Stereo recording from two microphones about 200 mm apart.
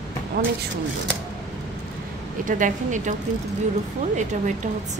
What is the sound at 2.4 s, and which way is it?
Speech, 40° right (ahead or behind).